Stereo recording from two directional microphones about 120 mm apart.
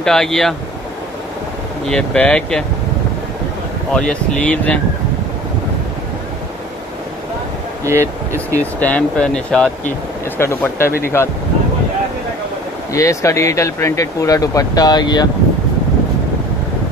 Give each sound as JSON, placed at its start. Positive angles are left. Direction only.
{"t": 0.0, "sound": "speech", "side_deg": 5}
{"t": 1.9, "sound": "speech", "side_deg": 10}
{"t": 3.9, "sound": "speech", "side_deg": 5}
{"t": 7.8, "sound": "speech", "side_deg": -20}
{"t": 8.7, "sound": "speech", "side_deg": 15}
{"t": 10.3, "sound": "speech", "side_deg": 20}
{"t": 12.9, "sound": "speech", "side_deg": 25}